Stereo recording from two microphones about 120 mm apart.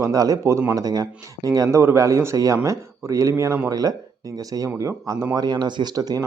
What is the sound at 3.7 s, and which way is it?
Speech, 30° right (ahead or behind).